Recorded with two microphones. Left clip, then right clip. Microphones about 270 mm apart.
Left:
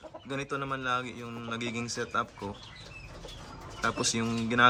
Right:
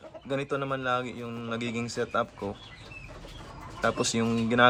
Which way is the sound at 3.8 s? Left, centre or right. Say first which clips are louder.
Right 3 dB; centre.